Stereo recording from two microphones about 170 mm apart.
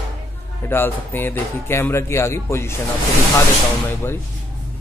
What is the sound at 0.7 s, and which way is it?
Speech, 10° left (ahead or behind).